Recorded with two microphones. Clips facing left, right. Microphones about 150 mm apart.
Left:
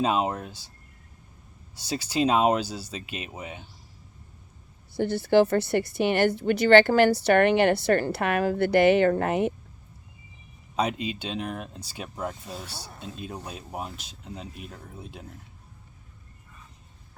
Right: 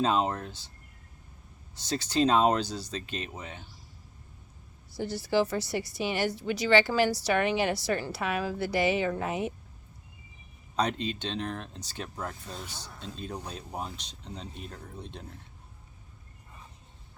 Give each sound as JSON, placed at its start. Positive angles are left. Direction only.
{"t": 0.0, "sound": "speech", "side_deg": 10}
{"t": 1.7, "sound": "speech", "side_deg": 10}
{"t": 4.9, "sound": "speech", "side_deg": 60}
{"t": 10.8, "sound": "speech", "side_deg": 10}